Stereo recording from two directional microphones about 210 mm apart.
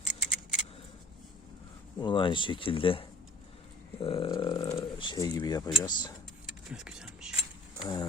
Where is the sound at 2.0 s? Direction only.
20° left (ahead or behind).